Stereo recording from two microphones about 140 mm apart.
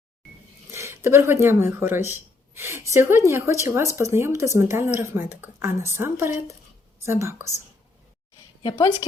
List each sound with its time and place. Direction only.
0.7 s speech: 20° right (ahead or behind)